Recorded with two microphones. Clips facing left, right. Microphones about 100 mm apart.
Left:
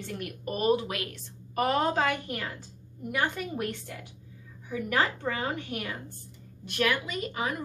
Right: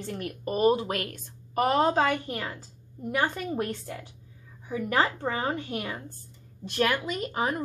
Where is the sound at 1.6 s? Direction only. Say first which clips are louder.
Right 3 dB; 25° right (ahead or behind).